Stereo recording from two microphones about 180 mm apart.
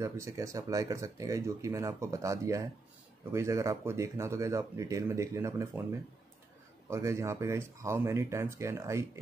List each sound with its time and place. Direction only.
0.0 s speech: 15° right (ahead or behind)